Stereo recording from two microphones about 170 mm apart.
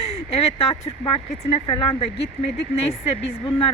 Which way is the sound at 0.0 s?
35° left (ahead or behind).